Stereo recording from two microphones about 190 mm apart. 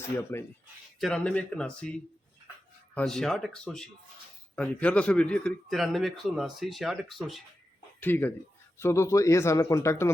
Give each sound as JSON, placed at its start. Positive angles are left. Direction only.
{"t": 0.3, "sound": "speech", "side_deg": 15}
{"t": 0.9, "sound": "a man's voice", "side_deg": 0}
{"t": 8.0, "sound": "speech", "side_deg": 10}